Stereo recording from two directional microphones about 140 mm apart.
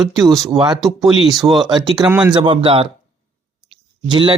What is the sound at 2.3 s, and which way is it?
Speech, 35° right (ahead or behind).